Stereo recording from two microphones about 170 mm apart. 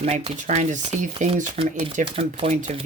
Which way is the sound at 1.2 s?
45° right (ahead or behind).